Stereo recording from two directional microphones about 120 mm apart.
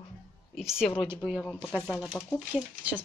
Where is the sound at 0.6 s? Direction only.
5° right (ahead or behind).